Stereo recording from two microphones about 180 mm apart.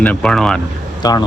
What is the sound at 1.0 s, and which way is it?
Speech, 20° left (ahead or behind).